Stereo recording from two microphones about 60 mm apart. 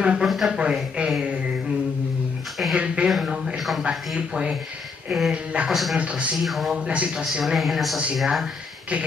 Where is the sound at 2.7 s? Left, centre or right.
Centre.